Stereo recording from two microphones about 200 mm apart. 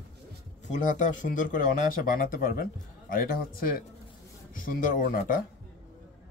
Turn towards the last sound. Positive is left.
turn(degrees=45)  # may be behind; listen again after turning